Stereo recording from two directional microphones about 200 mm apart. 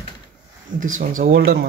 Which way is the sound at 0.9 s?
40° right (ahead or behind).